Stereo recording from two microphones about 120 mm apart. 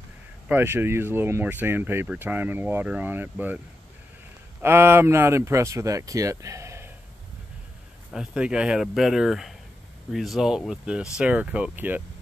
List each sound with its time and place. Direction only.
0.5 s speech: 15° right (ahead or behind)
8.1 s speech: 5° right (ahead or behind)